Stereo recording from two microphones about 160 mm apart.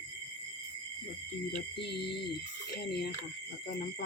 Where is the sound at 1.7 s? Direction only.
90° left.